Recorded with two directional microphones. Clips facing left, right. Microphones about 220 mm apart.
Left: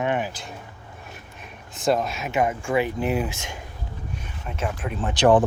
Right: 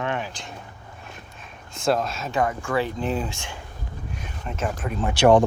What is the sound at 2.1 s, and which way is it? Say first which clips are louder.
Speech: left 1 dB; 20° left (ahead or behind).